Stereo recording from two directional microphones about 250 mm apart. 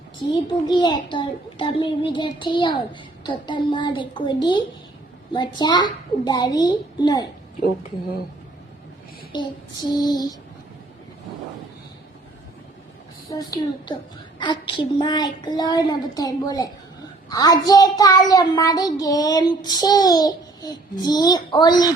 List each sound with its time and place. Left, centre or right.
0.7 s a child's voice: centre
9.9 s a child's voice: centre
13.3 s a child's voice: centre